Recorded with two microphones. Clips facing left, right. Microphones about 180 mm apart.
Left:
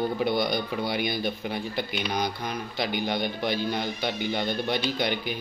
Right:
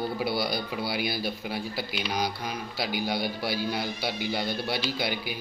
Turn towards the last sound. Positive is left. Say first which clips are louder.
# left 3 dB
turn(degrees=-5)  # may be behind; listen again after turning